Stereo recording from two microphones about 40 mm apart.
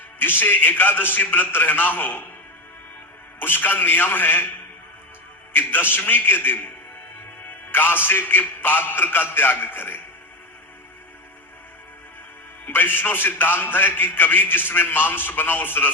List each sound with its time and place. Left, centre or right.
0.2 s a man's voice: left
3.4 s a man's voice: left
5.5 s a man's voice: left
7.7 s a man's voice: left
12.6 s a man's voice: left